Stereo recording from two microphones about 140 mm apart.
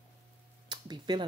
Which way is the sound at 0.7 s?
30° right (ahead or behind).